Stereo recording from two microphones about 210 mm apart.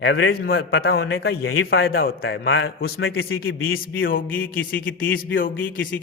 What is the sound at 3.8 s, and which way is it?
A man's voice, 45° left (ahead or behind).